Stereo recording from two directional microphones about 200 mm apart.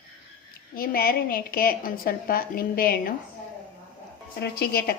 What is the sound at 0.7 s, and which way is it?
A woman's voice, 45° left (ahead or behind).